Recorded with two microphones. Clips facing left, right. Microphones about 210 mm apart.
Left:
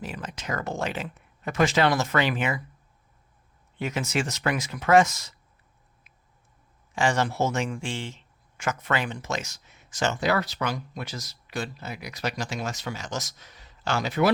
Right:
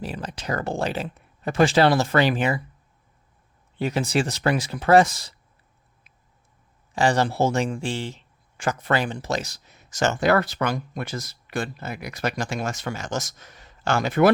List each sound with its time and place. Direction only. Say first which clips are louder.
0.0 s speech: right 4 dB; 35° right (ahead or behind)
3.8 s speech: right 5 dB; 35° right (ahead or behind)
6.9 s speech: right 4 dB; 35° right (ahead or behind); by 14.3 s 50° right (ahead or behind)